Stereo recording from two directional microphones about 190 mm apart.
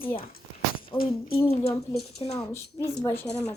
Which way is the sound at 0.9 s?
25° left (ahead or behind).